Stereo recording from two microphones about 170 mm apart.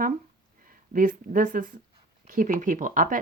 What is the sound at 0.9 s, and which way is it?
Speech, 55° right (ahead or behind).